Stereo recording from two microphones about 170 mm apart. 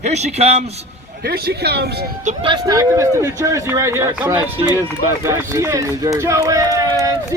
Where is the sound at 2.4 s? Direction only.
25° right (ahead or behind).